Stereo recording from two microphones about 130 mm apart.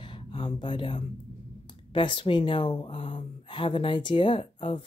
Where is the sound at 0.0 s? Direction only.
40° left (ahead or behind).